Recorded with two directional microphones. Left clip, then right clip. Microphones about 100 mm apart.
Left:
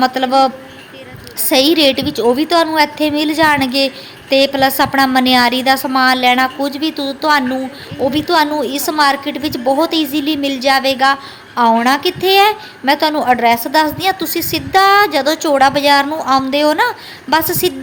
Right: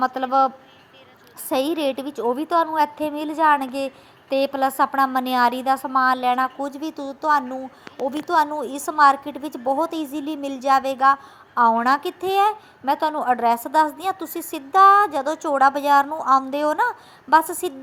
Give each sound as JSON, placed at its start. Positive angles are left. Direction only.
{"t": 0.0, "sound": "a woman's voice", "side_deg": -20}